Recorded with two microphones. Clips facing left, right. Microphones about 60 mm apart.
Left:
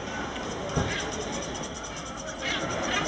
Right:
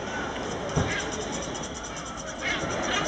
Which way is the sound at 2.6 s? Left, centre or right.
Centre.